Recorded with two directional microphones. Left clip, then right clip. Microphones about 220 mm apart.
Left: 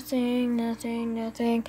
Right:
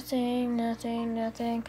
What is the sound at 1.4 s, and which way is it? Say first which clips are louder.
Speech: left 5 dB; 35° left (ahead or behind).